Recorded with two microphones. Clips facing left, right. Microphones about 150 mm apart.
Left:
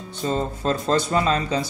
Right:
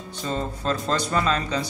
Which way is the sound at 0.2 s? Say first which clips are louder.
Left 4 dB; 25° left (ahead or behind).